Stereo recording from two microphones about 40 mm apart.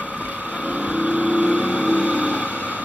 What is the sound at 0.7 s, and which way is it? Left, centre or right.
Vehicle, right.